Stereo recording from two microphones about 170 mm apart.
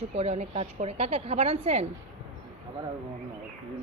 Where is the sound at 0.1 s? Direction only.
40° right (ahead or behind).